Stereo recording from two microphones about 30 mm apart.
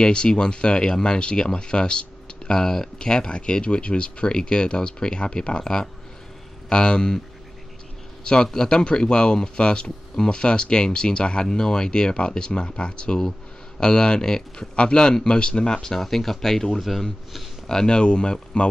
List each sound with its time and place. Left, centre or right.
0.0 s speech: left
5.6 s speech: left
8.6 s speech: left
16.0 s speech: centre
16.8 s speech: centre
17.6 s speech: left